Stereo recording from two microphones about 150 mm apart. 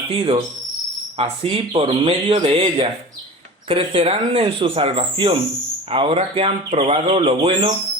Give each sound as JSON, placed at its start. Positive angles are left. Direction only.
{"t": 0.1, "sound": "speech", "side_deg": -35}